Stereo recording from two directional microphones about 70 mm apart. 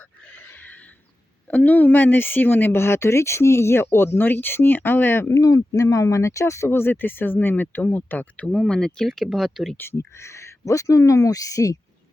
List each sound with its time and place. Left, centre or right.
0.3 s a sound: left
1.5 s speech: left
5.3 s speech: left
6.7 s speech: left; by 9.7 s centre
9.7 s speech: left